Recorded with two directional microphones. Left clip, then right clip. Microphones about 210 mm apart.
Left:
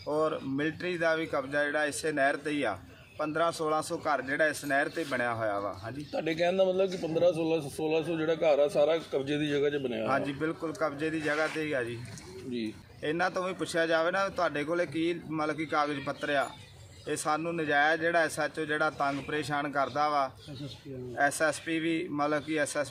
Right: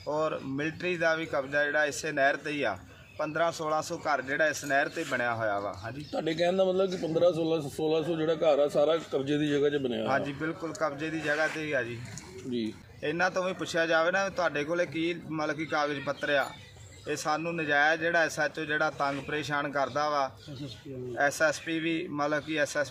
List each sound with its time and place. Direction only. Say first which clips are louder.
0.1 s a man's voice: left 1 dB; 5° right (ahead or behind)
6.1 s a man's voice: even; 35° right (ahead or behind)
10.1 s a man's voice: left 1 dB; 5° right (ahead or behind)
12.5 s a man's voice: right 2 dB; 35° right (ahead or behind)
13.0 s a man's voice: right 2 dB; 5° right (ahead or behind)